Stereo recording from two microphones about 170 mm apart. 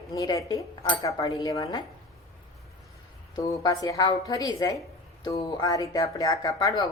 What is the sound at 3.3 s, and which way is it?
A woman's voice, 20° left (ahead or behind).